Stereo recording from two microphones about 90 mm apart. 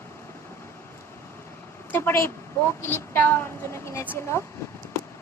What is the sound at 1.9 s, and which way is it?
A woman's voice, 25° left (ahead or behind).